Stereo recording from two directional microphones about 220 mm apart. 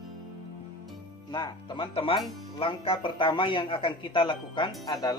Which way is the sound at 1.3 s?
20° left (ahead or behind).